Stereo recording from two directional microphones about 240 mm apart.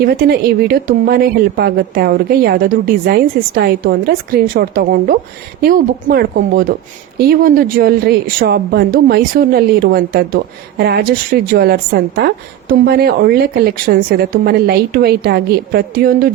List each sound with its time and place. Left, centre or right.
0.0 s speech: right